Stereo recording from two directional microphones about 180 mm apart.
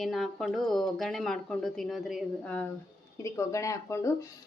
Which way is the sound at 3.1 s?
15° left (ahead or behind).